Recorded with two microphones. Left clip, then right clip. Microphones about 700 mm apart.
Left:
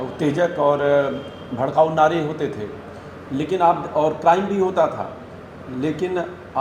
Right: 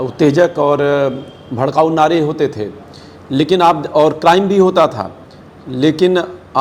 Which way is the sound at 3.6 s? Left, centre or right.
Right.